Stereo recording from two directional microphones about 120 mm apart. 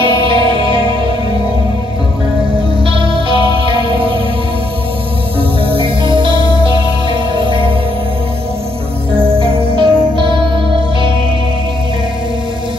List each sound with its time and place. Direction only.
0.0 s music: 45° right (ahead or behind)
2.8 s music: 45° right (ahead or behind)
5.7 s music: 45° right (ahead or behind)
9.4 s music: 50° right (ahead or behind)